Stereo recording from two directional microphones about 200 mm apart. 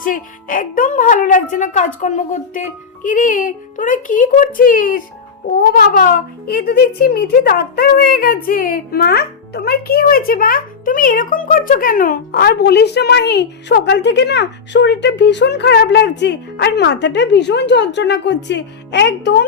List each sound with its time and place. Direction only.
0.0 s a child's voice: 45° left (ahead or behind)